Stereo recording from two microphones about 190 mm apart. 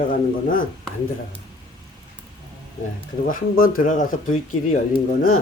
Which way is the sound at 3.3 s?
45° left (ahead or behind).